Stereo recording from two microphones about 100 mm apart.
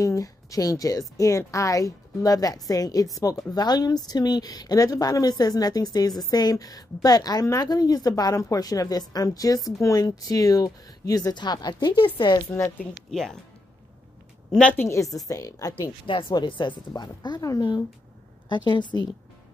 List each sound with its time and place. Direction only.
0.0 s a woman's voice: 35° left (ahead or behind); by 12.4 s 50° left (ahead or behind)
12.5 s a woman's voice: 25° left (ahead or behind)
13.1 s speech: 5° left (ahead or behind)
14.5 s a woman's voice: 10° left (ahead or behind)
14.8 s a woman's voice: 30° left (ahead or behind)
16.1 s speech: 55° left (ahead or behind)
18.5 s speech: 50° left (ahead or behind)